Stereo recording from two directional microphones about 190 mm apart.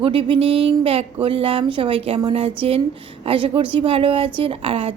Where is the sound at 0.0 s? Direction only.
30° right (ahead or behind).